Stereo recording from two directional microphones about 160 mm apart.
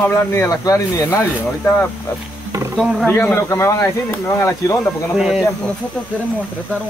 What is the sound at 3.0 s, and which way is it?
Speech, 15° left (ahead or behind).